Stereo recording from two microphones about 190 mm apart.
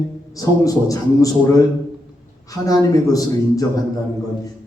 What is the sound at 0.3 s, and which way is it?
A man's voice, 20° left (ahead or behind).